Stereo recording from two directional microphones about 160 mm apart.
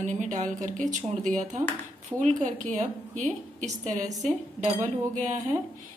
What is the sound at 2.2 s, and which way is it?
A woman's voice, 50° right (ahead or behind).